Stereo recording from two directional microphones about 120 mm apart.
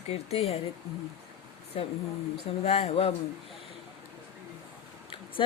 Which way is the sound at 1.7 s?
55° left (ahead or behind).